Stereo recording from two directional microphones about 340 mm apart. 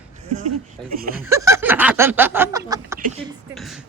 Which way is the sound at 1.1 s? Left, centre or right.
Centre.